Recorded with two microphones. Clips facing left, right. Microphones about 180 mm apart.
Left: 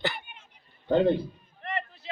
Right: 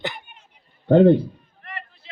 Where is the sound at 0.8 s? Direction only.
55° right (ahead or behind).